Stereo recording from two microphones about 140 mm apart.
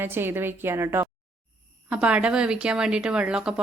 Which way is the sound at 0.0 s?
15° right (ahead or behind).